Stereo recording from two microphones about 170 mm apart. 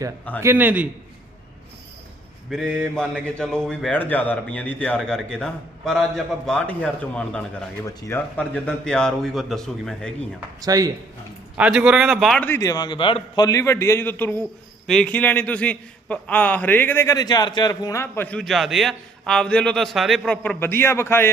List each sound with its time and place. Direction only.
0.4 s a man's voice: 10° right (ahead or behind)
2.5 s a man's voice: 5° left (ahead or behind)
7.9 s a man's voice: 20° left (ahead or behind)
8.4 s a man's voice: 5° left (ahead or behind)
10.6 s a man's voice: 20° right (ahead or behind)
11.5 s a man's voice: 5° right (ahead or behind)
12.4 s a man's voice: 15° left (ahead or behind)